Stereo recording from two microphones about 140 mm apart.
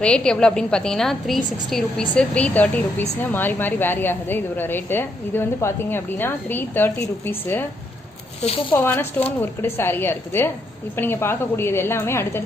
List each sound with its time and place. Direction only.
0.0 s a woman's voice: 5° left (ahead or behind)
8.7 s a woman's voice: 15° left (ahead or behind)